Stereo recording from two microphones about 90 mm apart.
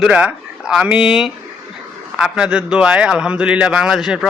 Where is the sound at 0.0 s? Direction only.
10° right (ahead or behind).